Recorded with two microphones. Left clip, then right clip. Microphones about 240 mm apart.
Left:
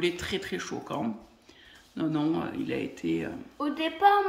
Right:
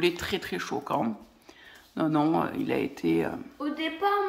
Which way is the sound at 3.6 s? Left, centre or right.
Left.